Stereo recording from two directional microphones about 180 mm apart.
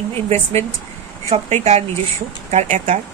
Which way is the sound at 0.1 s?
35° right (ahead or behind).